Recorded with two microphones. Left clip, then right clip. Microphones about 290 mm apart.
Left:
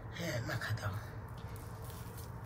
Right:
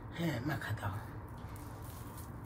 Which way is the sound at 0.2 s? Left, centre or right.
Centre.